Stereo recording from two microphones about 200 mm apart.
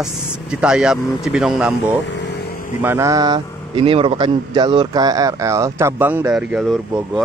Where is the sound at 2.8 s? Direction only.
15° right (ahead or behind).